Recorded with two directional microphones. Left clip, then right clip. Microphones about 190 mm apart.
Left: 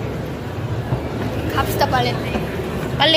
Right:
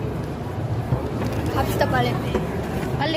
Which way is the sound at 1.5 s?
35° right (ahead or behind).